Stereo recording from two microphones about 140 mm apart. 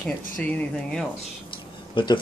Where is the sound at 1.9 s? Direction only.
30° left (ahead or behind).